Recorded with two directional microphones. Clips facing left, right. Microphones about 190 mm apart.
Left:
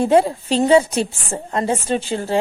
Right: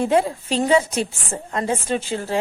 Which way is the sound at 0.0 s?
30° left (ahead or behind).